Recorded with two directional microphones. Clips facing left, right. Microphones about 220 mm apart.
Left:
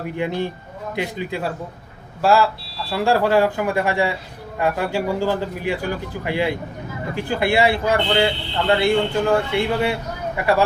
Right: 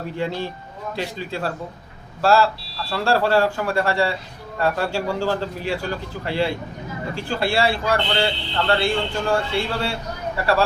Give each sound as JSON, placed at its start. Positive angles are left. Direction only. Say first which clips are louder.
{"t": 0.2, "sound": "a man's voice", "louder": "left 3 dB", "side_deg": 15}